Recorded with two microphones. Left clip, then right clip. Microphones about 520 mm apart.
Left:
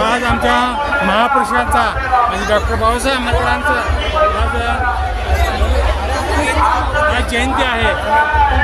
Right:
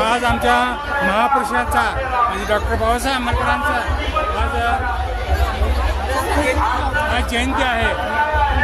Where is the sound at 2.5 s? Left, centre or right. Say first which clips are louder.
Left 4 dB; right.